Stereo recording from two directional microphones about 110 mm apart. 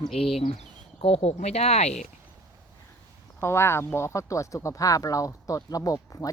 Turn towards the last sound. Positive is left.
turn(degrees=30)  # may be behind; listen again after turning